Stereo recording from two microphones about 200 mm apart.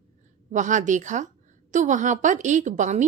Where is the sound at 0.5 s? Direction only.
40° right (ahead or behind).